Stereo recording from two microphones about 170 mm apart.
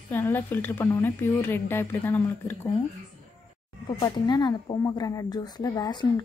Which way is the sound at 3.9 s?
30° left (ahead or behind).